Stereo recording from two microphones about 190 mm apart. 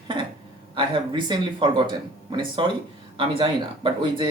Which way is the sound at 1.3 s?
25° right (ahead or behind).